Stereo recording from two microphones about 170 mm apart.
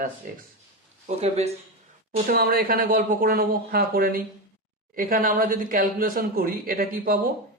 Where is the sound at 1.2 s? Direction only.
40° right (ahead or behind).